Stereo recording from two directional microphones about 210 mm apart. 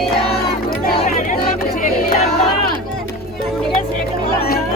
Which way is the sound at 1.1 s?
40° left (ahead or behind).